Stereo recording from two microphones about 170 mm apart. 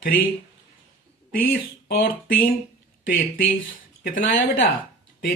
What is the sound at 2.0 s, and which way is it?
Speech, 55° left (ahead or behind).